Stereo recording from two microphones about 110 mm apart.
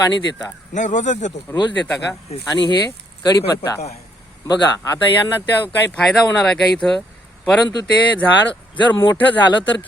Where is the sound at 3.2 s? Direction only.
35° left (ahead or behind).